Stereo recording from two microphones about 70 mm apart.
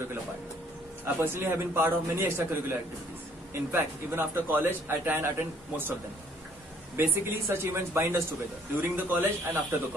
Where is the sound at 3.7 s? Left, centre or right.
Right.